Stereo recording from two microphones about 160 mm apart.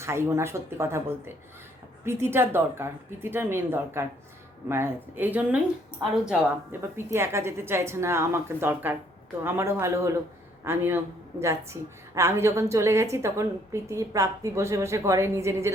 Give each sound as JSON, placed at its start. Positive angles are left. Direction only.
{"t": 0.0, "sound": "a woman's voice", "side_deg": -15}
{"t": 6.7, "sound": "a woman's voice", "side_deg": -15}